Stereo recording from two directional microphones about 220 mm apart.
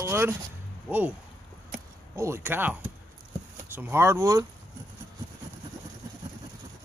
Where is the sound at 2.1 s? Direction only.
10° right (ahead or behind).